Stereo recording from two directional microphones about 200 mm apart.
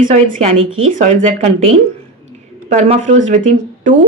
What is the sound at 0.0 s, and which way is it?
Speech, 40° right (ahead or behind).